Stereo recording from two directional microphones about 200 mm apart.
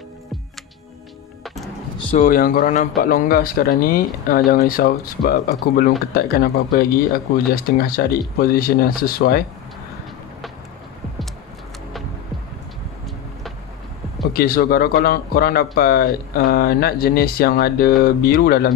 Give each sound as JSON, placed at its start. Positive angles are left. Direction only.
{"t": 1.4, "sound": "music", "side_deg": 0}
{"t": 2.0, "sound": "speech", "side_deg": 25}
{"t": 2.2, "sound": "a man's voice", "side_deg": 45}
{"t": 14.3, "sound": "speech", "side_deg": 50}